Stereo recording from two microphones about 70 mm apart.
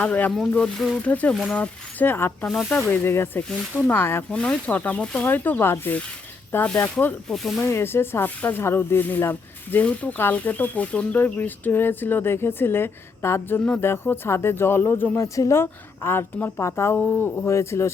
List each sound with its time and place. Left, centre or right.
0.0 s a woman's voice: centre
4.3 s a woman's voice: centre
7.3 s speech: centre
7.6 s a woman's voice: left
15.2 s a woman's voice: left
17.0 s speech: left
17.4 s a woman's voice: left